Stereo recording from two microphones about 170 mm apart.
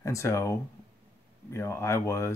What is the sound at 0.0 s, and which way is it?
Speech, 15° left (ahead or behind).